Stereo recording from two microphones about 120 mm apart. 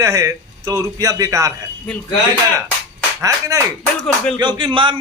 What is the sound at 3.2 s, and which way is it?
Speech, 25° right (ahead or behind).